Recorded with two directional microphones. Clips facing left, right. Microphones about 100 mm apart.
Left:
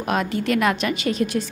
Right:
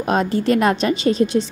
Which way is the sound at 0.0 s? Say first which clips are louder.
Right 4 dB; 30° right (ahead or behind).